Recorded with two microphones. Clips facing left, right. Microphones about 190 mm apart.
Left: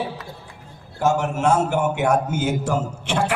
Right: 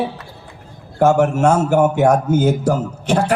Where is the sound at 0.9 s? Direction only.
50° right (ahead or behind).